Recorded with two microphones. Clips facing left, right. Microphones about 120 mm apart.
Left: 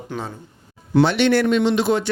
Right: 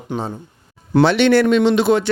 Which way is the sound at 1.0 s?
90° right.